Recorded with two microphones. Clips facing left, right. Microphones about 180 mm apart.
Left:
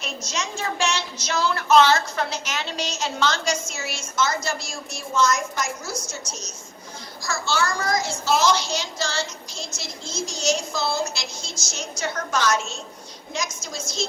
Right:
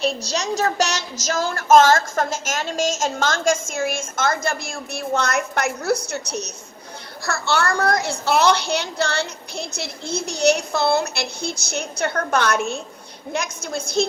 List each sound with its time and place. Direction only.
0.0 s a woman's voice: 35° right (ahead or behind); by 14.1 s 60° right (ahead or behind)